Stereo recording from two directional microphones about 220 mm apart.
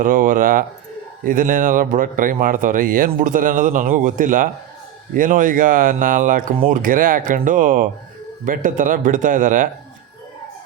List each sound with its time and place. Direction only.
0.0 s speech: 40° right (ahead or behind)